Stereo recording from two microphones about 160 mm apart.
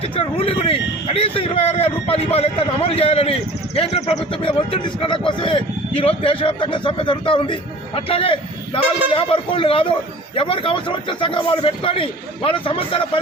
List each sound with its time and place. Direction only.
0.2 s speech: 35° left (ahead or behind)